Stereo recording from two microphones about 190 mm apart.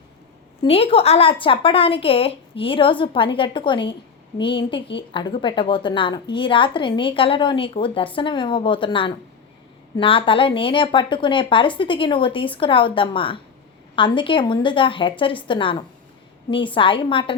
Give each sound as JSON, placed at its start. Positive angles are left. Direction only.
{"t": 0.6, "sound": "a woman's voice", "side_deg": 30}